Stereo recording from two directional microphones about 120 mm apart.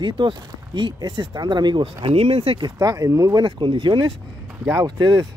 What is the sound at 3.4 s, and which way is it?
Speech, 40° right (ahead or behind).